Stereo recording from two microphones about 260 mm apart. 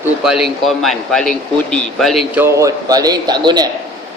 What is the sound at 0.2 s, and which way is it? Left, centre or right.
A man's voice, centre.